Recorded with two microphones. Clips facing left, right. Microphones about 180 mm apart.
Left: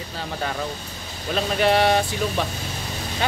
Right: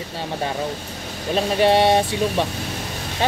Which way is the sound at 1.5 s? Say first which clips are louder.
Right 3 dB; 25° right (ahead or behind).